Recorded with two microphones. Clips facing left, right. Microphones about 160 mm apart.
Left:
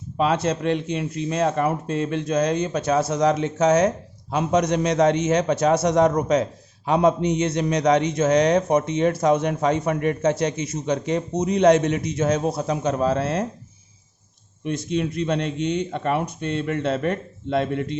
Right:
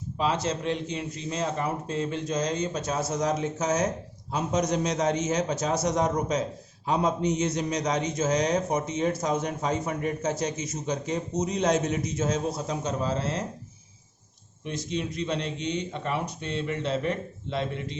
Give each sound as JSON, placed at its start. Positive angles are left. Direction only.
{"t": 0.2, "sound": "a man's voice", "side_deg": 60}
{"t": 14.6, "sound": "a man's voice", "side_deg": 55}